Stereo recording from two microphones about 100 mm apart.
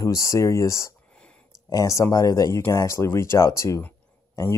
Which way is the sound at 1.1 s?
10° left (ahead or behind).